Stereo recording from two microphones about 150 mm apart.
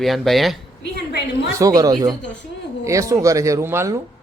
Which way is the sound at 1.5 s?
25° right (ahead or behind).